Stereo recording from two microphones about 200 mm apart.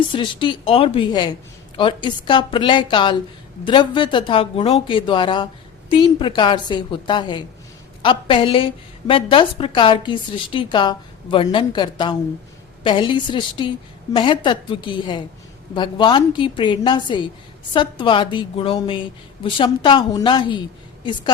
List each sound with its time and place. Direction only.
0.1 s a woman's voice: 25° left (ahead or behind)